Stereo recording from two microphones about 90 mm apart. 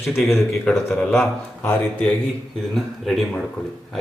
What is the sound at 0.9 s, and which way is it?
Speech, 25° left (ahead or behind).